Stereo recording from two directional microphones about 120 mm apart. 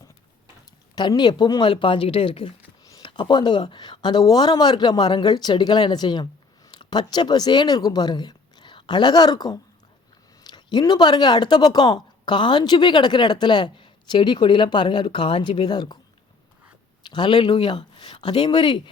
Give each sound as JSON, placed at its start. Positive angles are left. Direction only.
{"t": 0.9, "sound": "speech", "side_deg": 40}
{"t": 17.0, "sound": "speech", "side_deg": 40}